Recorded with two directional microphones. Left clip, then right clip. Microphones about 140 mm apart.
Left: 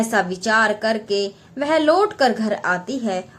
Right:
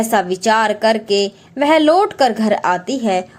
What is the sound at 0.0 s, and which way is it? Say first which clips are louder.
A woman's voice: right 5 dB; 30° right (ahead or behind).